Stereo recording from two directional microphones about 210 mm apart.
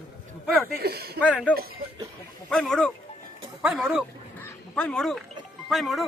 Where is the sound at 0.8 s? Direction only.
50° right (ahead or behind).